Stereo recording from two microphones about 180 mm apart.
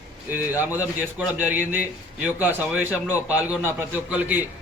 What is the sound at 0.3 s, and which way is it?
Speech, 10° right (ahead or behind).